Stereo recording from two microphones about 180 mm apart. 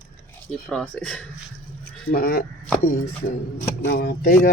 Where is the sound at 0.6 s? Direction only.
5° left (ahead or behind).